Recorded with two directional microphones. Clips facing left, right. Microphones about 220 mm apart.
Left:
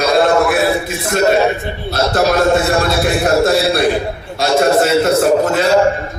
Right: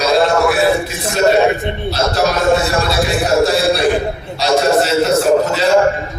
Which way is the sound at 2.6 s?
50° left (ahead or behind).